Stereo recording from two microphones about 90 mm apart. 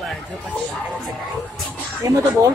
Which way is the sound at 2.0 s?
40° right (ahead or behind).